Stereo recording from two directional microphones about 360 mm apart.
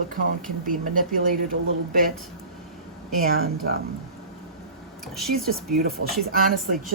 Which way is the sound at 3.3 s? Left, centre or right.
Right.